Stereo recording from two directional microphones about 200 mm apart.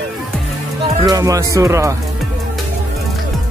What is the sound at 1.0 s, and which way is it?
Music, 15° right (ahead or behind).